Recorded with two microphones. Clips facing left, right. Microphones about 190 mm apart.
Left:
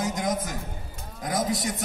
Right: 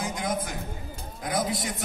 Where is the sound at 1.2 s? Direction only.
40° left (ahead or behind).